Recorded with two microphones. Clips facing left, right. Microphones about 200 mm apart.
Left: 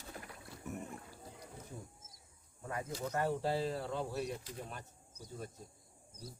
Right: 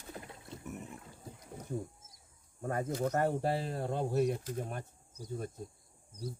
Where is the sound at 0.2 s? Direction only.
25° right (ahead or behind).